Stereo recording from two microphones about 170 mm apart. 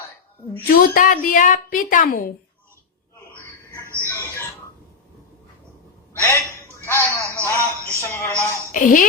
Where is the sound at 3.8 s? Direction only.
15° right (ahead or behind).